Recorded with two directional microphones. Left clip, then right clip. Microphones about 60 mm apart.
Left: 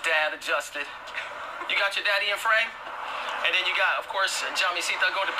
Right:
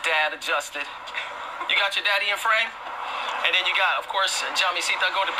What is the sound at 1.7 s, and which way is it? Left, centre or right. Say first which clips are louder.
Speech: right 3 dB; right.